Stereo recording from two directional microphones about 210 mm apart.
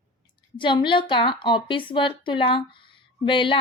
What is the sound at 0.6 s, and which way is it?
A woman's voice, 25° left (ahead or behind).